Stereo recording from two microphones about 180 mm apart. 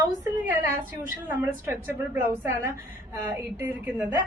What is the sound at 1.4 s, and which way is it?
Speech, 10° right (ahead or behind).